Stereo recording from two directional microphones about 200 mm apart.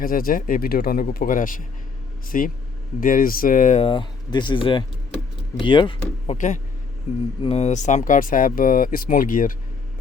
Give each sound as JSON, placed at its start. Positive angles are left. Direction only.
{"t": 0.0, "sound": "speech", "side_deg": 45}
{"t": 6.3, "sound": "speech", "side_deg": 35}